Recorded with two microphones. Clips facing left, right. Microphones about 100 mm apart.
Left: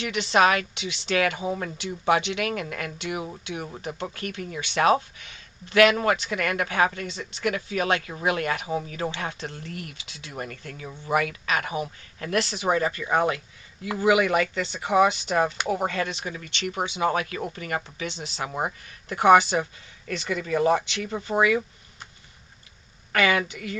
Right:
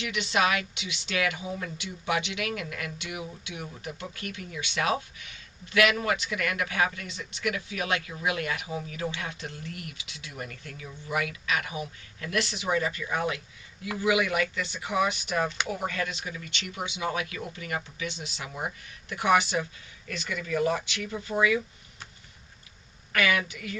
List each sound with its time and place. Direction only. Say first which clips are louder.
0.0 s speech: left 6 dB; 35° left (ahead or behind)
23.1 s speech: left 4 dB; 35° left (ahead or behind)